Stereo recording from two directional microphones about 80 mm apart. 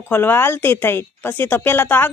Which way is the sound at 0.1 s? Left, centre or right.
Left.